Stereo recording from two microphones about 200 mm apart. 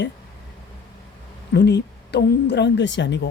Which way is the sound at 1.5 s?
60° left (ahead or behind).